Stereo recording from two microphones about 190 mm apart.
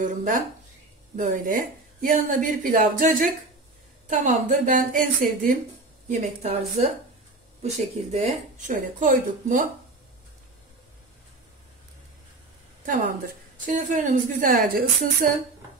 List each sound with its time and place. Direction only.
0.0 s a woman's voice: 40° right (ahead or behind)
13.7 s a woman's voice: 45° right (ahead or behind)